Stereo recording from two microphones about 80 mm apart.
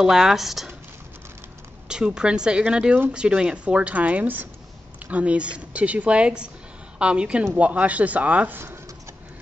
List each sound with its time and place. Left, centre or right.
0.0 s speech: centre
1.9 s speech: centre